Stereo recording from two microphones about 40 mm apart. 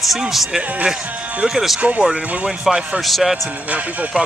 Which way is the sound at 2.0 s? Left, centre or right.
Centre.